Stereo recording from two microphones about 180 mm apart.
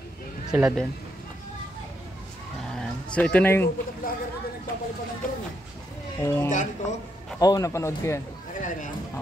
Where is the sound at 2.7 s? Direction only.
5° left (ahead or behind).